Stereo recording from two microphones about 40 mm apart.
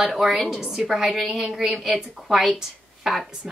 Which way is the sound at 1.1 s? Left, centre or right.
Centre.